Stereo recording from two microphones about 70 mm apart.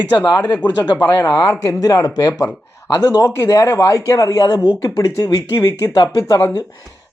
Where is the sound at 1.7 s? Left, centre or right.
Left.